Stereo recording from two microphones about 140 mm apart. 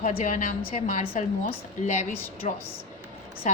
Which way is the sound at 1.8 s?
55° left (ahead or behind).